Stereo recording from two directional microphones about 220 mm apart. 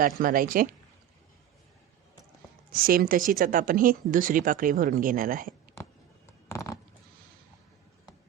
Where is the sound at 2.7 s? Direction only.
40° right (ahead or behind).